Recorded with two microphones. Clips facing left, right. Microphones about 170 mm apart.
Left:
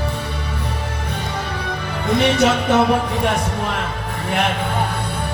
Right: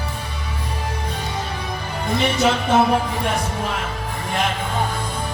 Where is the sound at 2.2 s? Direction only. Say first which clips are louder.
Left 3 dB; 75° left (ahead or behind).